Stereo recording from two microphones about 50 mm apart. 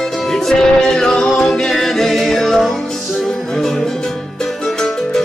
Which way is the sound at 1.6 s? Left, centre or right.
Centre.